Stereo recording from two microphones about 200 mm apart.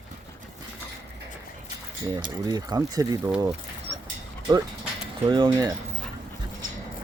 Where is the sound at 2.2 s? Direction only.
20° right (ahead or behind).